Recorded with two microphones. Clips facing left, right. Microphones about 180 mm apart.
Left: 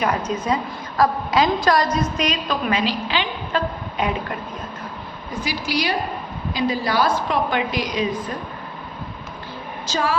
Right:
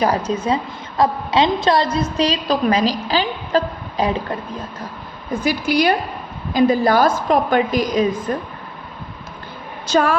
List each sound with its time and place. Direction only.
0.3 s a woman's voice: 30° right (ahead or behind)
5.3 s a woman's voice: 50° right (ahead or behind)
9.8 s a woman's voice: 55° right (ahead or behind)